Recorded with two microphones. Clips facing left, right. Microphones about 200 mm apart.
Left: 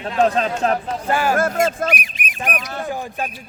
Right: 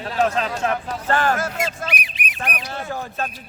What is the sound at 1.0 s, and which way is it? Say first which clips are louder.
Speech: even; 10° left (ahead or behind).